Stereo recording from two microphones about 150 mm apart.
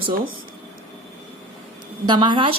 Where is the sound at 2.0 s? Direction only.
30° right (ahead or behind).